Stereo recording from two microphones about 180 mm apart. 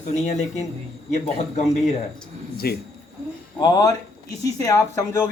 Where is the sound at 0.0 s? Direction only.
40° left (ahead or behind).